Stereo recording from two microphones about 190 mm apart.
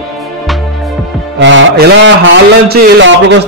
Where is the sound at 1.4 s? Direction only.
80° right.